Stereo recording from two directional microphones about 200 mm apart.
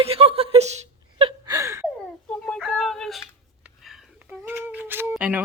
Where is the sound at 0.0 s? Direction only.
30° right (ahead or behind).